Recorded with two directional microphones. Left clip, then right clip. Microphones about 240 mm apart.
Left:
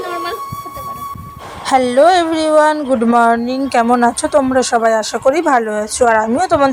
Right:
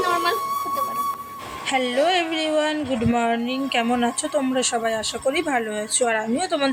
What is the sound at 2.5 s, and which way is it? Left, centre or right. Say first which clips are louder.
Speech: left 11 dB; left.